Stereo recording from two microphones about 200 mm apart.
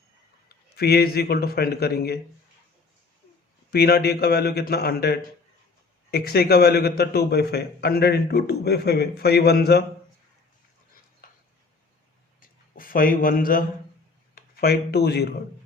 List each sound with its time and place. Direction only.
0.4 s a man's voice: 50° left (ahead or behind)
3.7 s a man's voice: 50° left (ahead or behind)
12.4 s a sound: 45° left (ahead or behind)
14.3 s speech: 50° left (ahead or behind)